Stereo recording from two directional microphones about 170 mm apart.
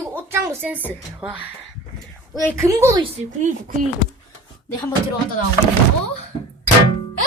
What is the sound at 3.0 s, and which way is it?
Speech, 40° right (ahead or behind).